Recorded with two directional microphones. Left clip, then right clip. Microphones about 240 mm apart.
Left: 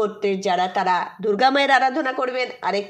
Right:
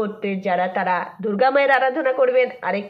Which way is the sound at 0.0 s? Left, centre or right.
Left.